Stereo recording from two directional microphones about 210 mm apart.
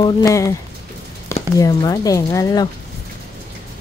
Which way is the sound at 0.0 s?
15° left (ahead or behind).